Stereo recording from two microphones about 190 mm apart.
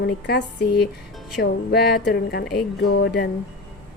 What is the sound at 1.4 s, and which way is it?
A woman's voice, 55° left (ahead or behind).